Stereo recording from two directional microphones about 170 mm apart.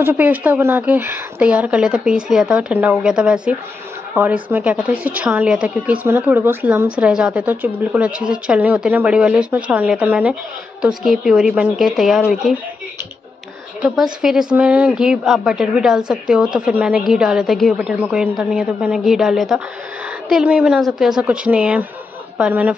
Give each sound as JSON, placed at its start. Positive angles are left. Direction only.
{"t": 0.0, "sound": "a woman's voice", "side_deg": -10}
{"t": 13.8, "sound": "a woman's voice", "side_deg": -5}